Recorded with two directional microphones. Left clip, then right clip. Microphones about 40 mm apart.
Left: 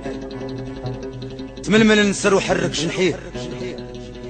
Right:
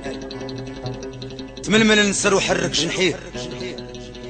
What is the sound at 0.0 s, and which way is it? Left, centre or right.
Music, right.